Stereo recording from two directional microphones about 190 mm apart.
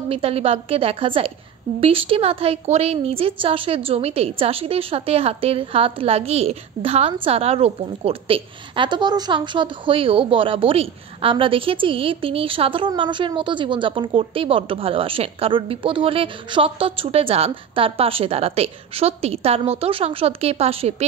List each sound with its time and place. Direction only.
0.1 s a woman's voice: 30° right (ahead or behind)